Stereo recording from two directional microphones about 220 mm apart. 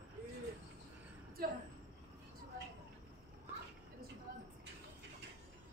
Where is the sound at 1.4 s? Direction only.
45° right (ahead or behind).